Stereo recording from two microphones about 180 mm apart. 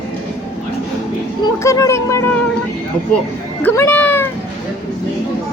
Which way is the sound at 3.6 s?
10° left (ahead or behind).